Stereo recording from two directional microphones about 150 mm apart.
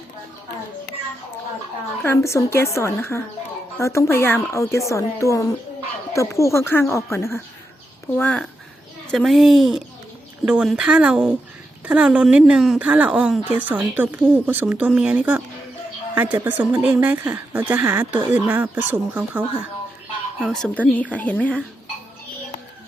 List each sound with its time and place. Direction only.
2.0 s a woman's voice: 15° left (ahead or behind); by 19.5 s 10° right (ahead or behind)
20.5 s speech: 5° left (ahead or behind)